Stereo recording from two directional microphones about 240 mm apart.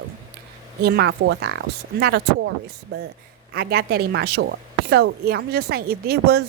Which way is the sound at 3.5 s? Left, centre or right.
Right.